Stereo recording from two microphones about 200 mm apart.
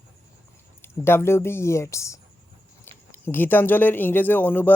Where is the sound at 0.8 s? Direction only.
10° left (ahead or behind).